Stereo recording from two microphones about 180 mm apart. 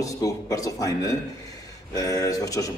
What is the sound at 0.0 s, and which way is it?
A man's voice, 20° left (ahead or behind).